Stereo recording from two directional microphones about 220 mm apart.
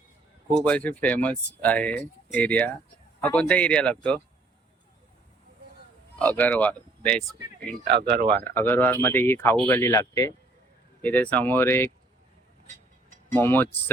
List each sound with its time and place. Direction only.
0.6 s speech: 5° left (ahead or behind)
6.1 s speech: 5° left (ahead or behind)
7.9 s speech: 50° right (ahead or behind)
8.4 s speech: 10° left (ahead or behind)
13.3 s speech: 10° left (ahead or behind)